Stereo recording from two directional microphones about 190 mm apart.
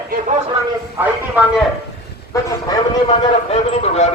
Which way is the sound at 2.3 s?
15° left (ahead or behind).